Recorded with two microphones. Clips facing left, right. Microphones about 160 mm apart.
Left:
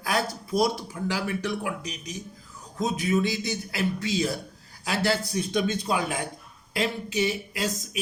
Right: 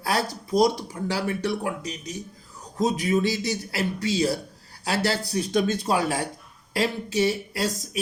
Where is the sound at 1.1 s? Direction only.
35° right (ahead or behind).